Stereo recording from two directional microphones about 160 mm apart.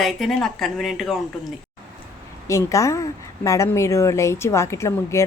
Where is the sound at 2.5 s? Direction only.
20° left (ahead or behind).